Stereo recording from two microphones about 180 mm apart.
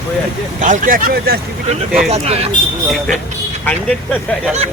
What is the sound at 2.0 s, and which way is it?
Speech, 35° right (ahead or behind).